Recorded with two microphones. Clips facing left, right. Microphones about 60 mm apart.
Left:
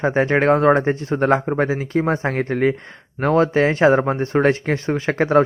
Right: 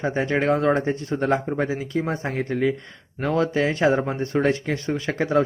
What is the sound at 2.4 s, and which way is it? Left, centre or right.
Speech, left.